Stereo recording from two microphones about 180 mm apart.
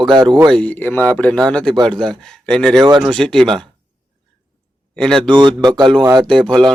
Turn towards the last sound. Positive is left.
turn(degrees=5)  # may be behind; listen again after turning